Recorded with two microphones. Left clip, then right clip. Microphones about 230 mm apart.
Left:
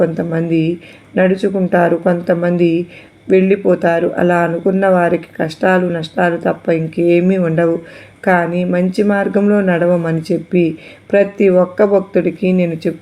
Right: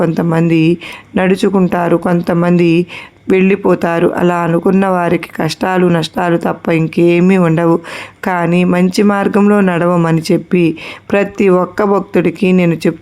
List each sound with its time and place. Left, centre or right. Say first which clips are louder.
0.0 s speech: right 2 dB; right